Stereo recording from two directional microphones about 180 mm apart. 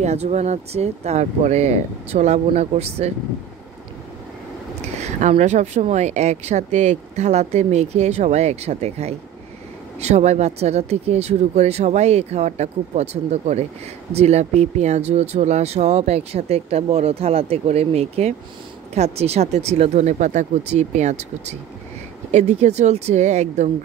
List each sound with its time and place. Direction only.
0.0 s speech: 35° right (ahead or behind)
4.9 s speech: 40° right (ahead or behind)